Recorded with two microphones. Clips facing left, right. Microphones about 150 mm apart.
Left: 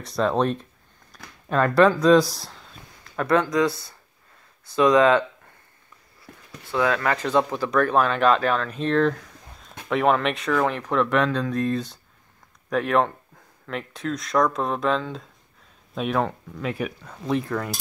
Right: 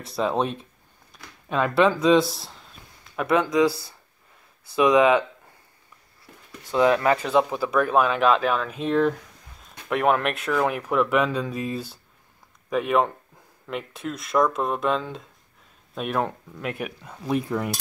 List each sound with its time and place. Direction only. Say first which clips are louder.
0.0 s speech: left 2 dB; 5° right (ahead or behind)
3.0 s a sound: left 1 dB; 5° right (ahead or behind)
4.7 s speech: left 1 dB; 10° right (ahead or behind)
6.7 s speech: right 3 dB; 20° right (ahead or behind)
7.2 s speech: even; 5° right (ahead or behind)